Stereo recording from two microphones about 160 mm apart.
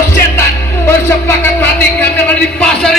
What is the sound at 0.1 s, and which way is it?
Music, 15° left (ahead or behind).